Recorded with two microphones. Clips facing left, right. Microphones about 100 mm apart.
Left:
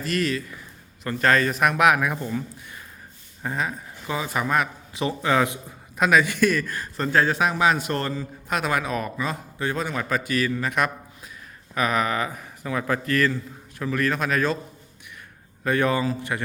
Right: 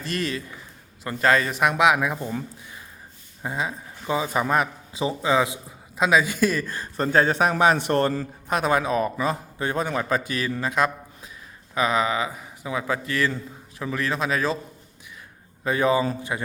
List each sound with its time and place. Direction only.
0.0 s speech: 25° right (ahead or behind)
3.4 s speech: 15° right (ahead or behind)
5.0 s a man's voice: 10° right (ahead or behind)
6.9 s a man's voice: 35° right (ahead or behind)
9.7 s a man's voice: 35° right (ahead or behind)
15.6 s a man's voice: 15° right (ahead or behind)